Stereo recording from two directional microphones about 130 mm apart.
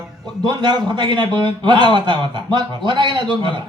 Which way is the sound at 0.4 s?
35° right (ahead or behind).